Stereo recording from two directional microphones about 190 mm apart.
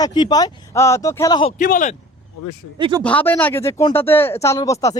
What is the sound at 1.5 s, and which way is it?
Speech, 45° left (ahead or behind).